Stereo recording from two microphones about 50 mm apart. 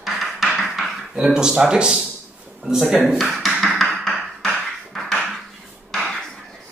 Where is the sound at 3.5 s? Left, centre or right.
Centre.